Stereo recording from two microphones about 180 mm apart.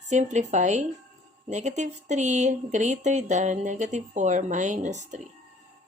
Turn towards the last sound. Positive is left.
turn(degrees=-40)  # may be behind; listen again after turning